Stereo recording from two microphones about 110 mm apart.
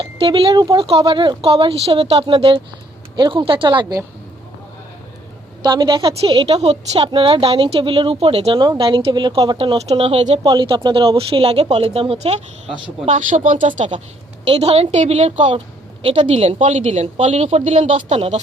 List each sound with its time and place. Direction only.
0.0 s speech: 55° right (ahead or behind)
0.5 s speech: 40° right (ahead or behind)
0.9 s a woman's voice: 60° right (ahead or behind)
5.6 s a woman's voice: 40° right (ahead or behind)
6.1 s a woman's voice: 60° right (ahead or behind); by 9.6 s 45° right (ahead or behind)
9.6 s a woman's voice: 55° right (ahead or behind)
10.4 s a woman's voice: 45° right (ahead or behind); by 12.7 s 70° right (ahead or behind)
13.1 s speech: 90° right
14.4 s a woman's voice: 65° right (ahead or behind); by 15.5 s 90° right
15.5 s a woman's voice: 60° right (ahead or behind); by 18.3 s 80° right